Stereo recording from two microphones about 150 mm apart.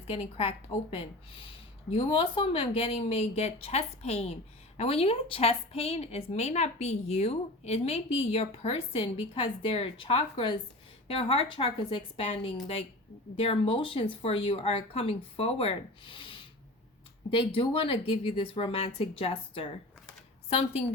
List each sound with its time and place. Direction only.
0.1 s a woman's voice: 40° left (ahead or behind)